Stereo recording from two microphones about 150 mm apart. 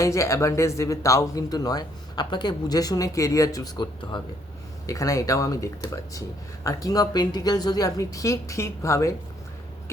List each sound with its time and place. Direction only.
0.0 s speech: 20° left (ahead or behind)